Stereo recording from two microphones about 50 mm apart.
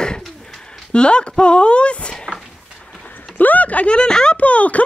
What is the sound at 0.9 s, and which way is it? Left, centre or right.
Speech, centre.